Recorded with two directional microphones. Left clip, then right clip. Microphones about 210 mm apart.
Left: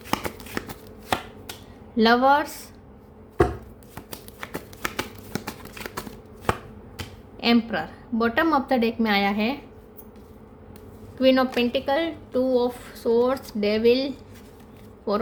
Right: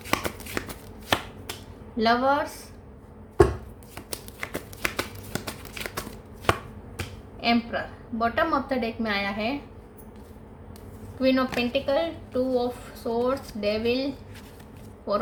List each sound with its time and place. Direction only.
0.1 s shuffling cards: 5° right (ahead or behind)
2.0 s speech: 50° left (ahead or behind)
3.9 s finger snapping: centre (ahead or behind)
4.9 s finger snapping: 10° right (ahead or behind)
5.7 s chopping: centre (ahead or behind)
7.3 s speech: 50° left (ahead or behind)
11.2 s speech: 45° left (ahead or behind)